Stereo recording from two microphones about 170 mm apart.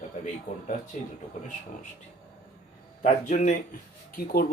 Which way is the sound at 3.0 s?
50° left (ahead or behind).